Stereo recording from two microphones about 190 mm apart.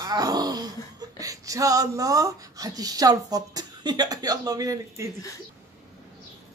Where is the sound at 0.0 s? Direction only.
20° right (ahead or behind).